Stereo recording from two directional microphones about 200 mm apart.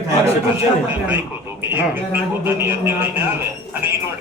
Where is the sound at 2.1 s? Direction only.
10° right (ahead or behind).